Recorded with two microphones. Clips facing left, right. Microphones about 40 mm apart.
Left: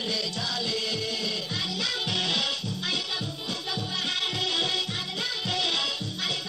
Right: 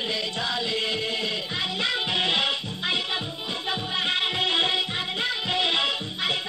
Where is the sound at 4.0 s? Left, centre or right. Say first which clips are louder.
Right 5 dB; right.